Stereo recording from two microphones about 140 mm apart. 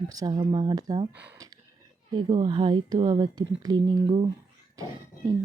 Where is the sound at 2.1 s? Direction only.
30° right (ahead or behind).